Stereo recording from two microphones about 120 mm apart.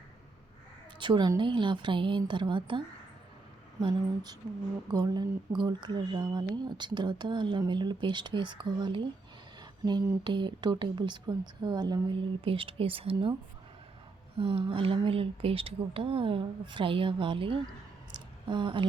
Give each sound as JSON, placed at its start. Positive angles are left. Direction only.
{"t": 0.9, "sound": "a woman's voice", "side_deg": -40}
{"t": 10.2, "sound": "speech", "side_deg": -40}
{"t": 12.5, "sound": "a woman's voice", "side_deg": -50}
{"t": 14.3, "sound": "a woman's voice", "side_deg": -45}
{"t": 18.1, "sound": "a sound", "side_deg": -40}